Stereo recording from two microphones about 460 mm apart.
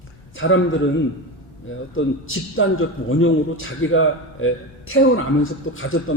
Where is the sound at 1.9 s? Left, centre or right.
Left.